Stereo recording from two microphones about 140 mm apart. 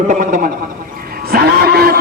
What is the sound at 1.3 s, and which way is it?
Vehicle, 90° right.